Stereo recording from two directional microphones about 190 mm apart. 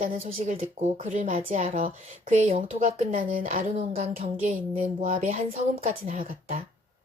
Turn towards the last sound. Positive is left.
turn(degrees=-45)  # may be behind; listen again after turning